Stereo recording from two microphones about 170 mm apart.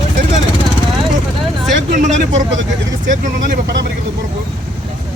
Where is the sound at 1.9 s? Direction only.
45° right (ahead or behind).